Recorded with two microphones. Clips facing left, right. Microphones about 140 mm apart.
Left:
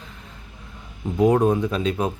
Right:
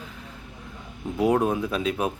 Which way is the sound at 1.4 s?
5° right (ahead or behind).